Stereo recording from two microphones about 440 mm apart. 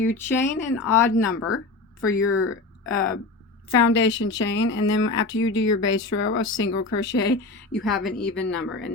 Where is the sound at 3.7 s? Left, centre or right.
Left.